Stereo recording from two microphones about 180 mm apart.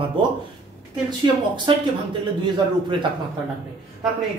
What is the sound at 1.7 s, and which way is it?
A woman's voice, 25° right (ahead or behind).